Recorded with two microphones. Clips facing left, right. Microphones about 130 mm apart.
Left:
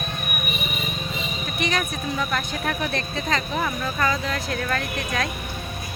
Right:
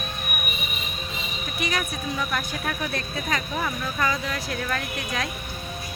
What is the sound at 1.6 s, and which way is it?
Speech, 10° right (ahead or behind).